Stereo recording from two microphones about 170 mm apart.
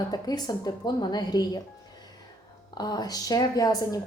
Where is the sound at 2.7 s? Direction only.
25° left (ahead or behind).